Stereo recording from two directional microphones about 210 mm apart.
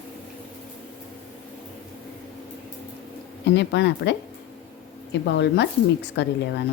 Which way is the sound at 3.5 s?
55° left (ahead or behind).